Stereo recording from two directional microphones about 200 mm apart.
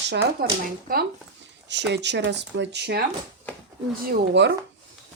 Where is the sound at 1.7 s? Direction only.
60° right (ahead or behind).